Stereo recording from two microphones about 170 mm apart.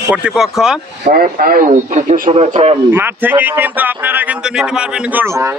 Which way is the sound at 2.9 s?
10° right (ahead or behind).